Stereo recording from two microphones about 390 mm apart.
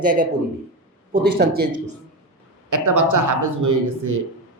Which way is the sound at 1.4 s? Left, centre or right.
Right.